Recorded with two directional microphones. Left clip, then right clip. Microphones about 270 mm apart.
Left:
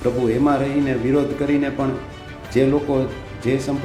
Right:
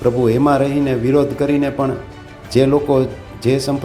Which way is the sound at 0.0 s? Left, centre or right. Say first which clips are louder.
Right 4 dB; right.